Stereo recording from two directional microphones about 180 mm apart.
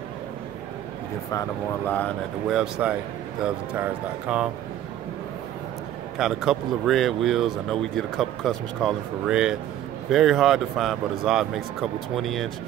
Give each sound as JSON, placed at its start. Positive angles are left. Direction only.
{"t": 1.3, "sound": "speech", "side_deg": 20}
{"t": 2.5, "sound": "speech", "side_deg": -5}
{"t": 6.1, "sound": "speech", "side_deg": 0}